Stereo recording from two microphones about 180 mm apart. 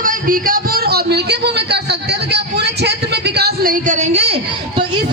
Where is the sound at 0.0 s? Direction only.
50° right (ahead or behind).